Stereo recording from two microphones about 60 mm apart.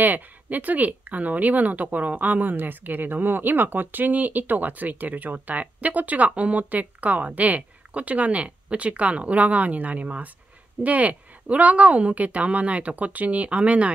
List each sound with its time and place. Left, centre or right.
0.0 s speech: right